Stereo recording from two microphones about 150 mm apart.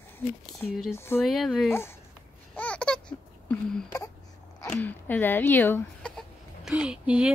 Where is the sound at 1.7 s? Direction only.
15° left (ahead or behind).